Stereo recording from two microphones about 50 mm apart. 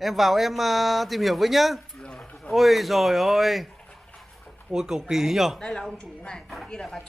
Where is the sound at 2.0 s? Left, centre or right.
Centre.